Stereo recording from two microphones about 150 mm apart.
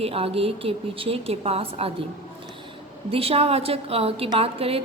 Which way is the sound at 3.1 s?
40° right (ahead or behind).